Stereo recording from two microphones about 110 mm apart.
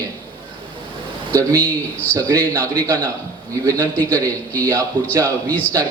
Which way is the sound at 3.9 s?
15° left (ahead or behind).